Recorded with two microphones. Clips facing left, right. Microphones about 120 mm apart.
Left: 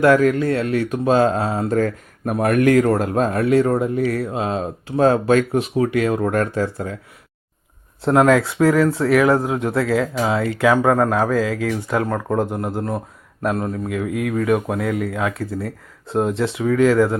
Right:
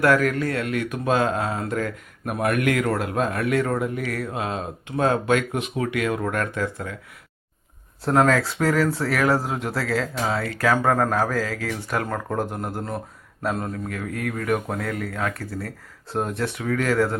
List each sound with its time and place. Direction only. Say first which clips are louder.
0.0 s speech: left 5 dB; 25° left (ahead or behind)
8.1 s a man's voice: left 4 dB; 5° left (ahead or behind)
9.4 s a man's voice: left 7 dB; centre (ahead or behind)